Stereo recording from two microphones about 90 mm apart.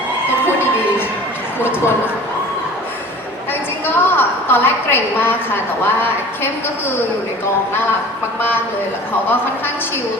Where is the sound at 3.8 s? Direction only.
25° left (ahead or behind).